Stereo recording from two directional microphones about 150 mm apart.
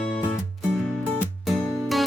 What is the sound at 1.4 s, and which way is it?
Music, centre (ahead or behind).